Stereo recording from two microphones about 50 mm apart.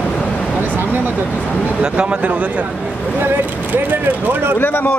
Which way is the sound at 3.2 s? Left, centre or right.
Right.